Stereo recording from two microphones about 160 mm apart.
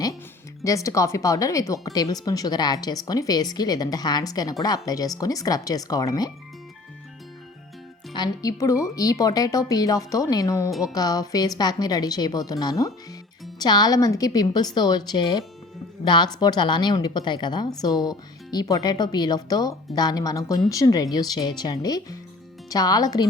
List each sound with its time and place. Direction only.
0.6 s speech: 20° left (ahead or behind)
8.1 s speech: 25° left (ahead or behind)
10.7 s speech: centre (ahead or behind)
10.9 s speech: 25° left (ahead or behind)